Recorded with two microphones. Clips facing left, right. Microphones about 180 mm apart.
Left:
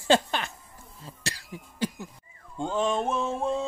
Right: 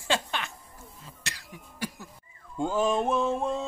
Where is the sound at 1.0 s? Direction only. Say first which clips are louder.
Left 8 dB; 30° left (ahead or behind).